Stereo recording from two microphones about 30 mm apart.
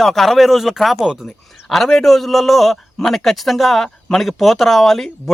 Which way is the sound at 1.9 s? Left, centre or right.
Centre.